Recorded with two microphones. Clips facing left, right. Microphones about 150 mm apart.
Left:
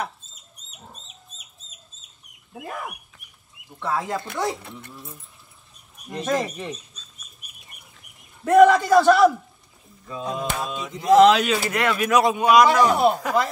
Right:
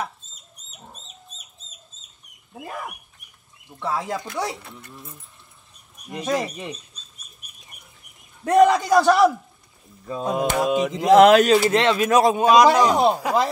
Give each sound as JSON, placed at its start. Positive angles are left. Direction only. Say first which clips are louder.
{"t": 3.8, "sound": "speech", "louder": "even", "side_deg": -15}
{"t": 6.1, "sound": "speech", "louder": "even", "side_deg": -10}
{"t": 8.5, "sound": "speech", "louder": "left 2 dB", "side_deg": -15}
{"t": 10.2, "sound": "mantra", "louder": "right 7 dB", "side_deg": -75}
{"t": 11.2, "sound": "speech", "louder": "right 3 dB", "side_deg": -50}
{"t": 11.7, "sound": "speech", "louder": "right 3 dB", "side_deg": -25}